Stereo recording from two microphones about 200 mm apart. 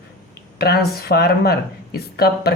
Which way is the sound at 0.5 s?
50° left (ahead or behind).